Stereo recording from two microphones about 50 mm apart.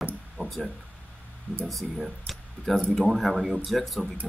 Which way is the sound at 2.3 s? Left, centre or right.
Centre.